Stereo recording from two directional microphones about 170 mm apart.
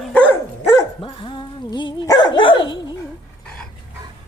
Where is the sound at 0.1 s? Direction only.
10° left (ahead or behind).